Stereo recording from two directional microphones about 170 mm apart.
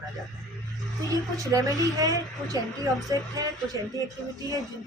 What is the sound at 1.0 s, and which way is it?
Speech, 20° right (ahead or behind).